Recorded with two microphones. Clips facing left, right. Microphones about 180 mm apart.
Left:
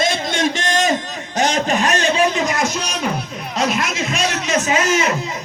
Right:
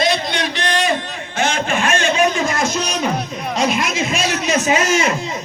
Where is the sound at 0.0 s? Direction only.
45° left (ahead or behind).